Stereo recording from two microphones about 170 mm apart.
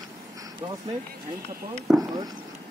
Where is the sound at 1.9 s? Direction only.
Centre (ahead or behind).